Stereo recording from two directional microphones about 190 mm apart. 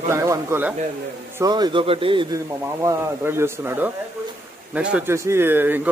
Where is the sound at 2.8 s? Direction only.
15° right (ahead or behind).